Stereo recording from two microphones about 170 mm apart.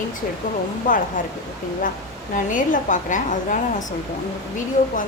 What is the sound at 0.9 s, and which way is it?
Speech, 50° left (ahead or behind).